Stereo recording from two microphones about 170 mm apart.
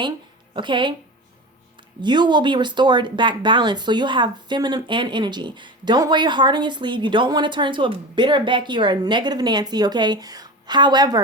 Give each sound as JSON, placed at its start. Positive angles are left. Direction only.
{"t": 0.5, "sound": "speech", "side_deg": -30}
{"t": 2.0, "sound": "speech", "side_deg": -25}